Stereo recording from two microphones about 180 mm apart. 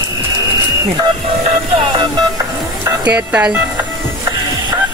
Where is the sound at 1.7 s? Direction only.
25° right (ahead or behind).